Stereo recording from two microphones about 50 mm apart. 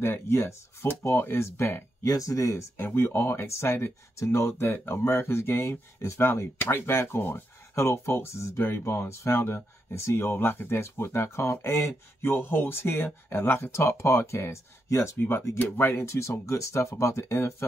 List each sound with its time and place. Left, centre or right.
0.0 s speech: left
0.8 s speech: left
3.0 s speech: left
7.7 s speech: left
12.3 s speech: left
15.1 s speech: left
16.1 s speech: left
16.9 s speech: left